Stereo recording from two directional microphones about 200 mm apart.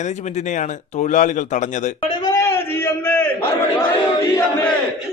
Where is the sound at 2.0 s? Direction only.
20° left (ahead or behind).